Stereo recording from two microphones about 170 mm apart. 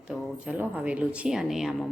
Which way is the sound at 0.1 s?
5° right (ahead or behind).